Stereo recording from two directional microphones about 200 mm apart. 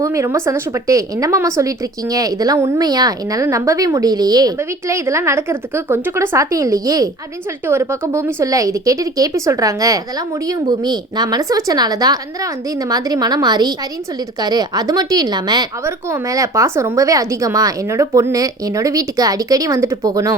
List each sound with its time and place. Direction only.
0.0 s a woman's voice: 15° right (ahead or behind)